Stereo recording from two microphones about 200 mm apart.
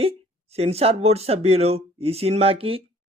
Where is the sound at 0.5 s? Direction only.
30° right (ahead or behind).